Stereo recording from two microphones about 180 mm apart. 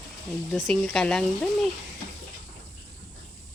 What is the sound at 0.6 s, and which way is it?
Speech, 5° left (ahead or behind).